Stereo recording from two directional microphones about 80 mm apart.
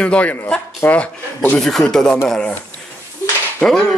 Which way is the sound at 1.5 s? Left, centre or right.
Centre.